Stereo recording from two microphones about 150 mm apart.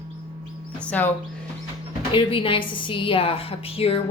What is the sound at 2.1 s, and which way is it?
A woman's voice, 35° left (ahead or behind).